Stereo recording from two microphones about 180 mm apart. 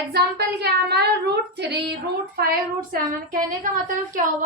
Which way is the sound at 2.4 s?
55° right (ahead or behind).